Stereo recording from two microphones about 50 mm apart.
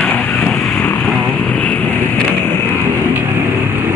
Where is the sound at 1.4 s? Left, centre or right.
Left.